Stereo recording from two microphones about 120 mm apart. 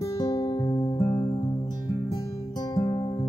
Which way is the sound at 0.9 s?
20° left (ahead or behind).